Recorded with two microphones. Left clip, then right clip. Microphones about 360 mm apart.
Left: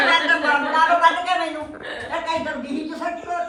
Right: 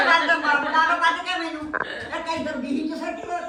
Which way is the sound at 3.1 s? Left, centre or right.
Centre.